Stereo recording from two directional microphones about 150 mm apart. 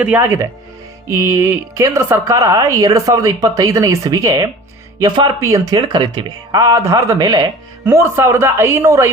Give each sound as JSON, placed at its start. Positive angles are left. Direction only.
{"t": 0.0, "sound": "a woman's voice", "side_deg": -10}